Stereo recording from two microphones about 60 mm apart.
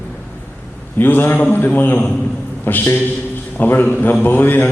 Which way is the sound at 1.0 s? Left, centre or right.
Left.